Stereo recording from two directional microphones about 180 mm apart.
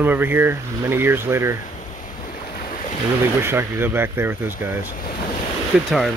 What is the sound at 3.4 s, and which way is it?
Speech, 15° right (ahead or behind).